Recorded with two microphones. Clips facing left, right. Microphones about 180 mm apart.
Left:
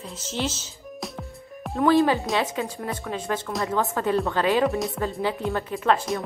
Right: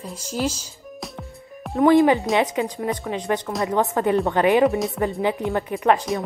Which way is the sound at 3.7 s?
15° right (ahead or behind).